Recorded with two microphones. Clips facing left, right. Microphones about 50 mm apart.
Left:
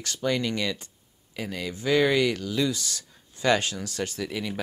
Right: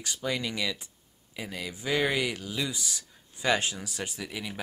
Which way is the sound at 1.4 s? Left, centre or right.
Centre.